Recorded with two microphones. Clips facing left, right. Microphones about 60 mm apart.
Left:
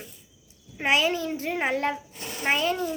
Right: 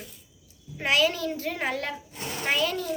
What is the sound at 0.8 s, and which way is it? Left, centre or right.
A woman's voice, left.